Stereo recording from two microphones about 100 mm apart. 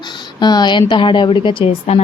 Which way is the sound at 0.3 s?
45° left (ahead or behind).